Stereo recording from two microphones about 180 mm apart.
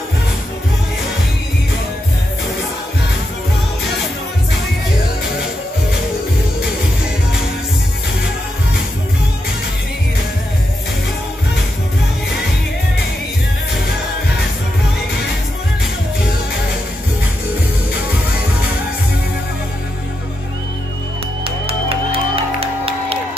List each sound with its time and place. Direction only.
21.5 s music: 30° right (ahead or behind)